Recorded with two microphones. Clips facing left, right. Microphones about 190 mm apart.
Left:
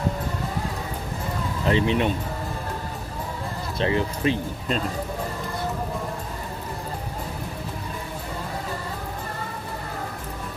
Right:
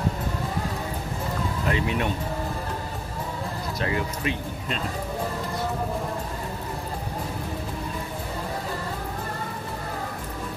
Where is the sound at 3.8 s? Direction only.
30° left (ahead or behind).